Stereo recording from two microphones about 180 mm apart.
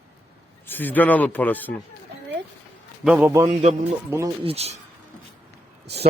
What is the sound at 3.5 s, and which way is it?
Speech, 35° right (ahead or behind).